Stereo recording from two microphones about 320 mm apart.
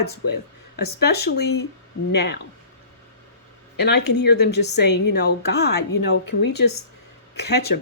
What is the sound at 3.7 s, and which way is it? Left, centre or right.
Speech, left.